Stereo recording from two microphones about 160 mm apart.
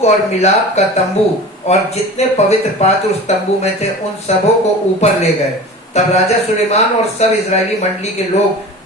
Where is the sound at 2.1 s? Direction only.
40° left (ahead or behind).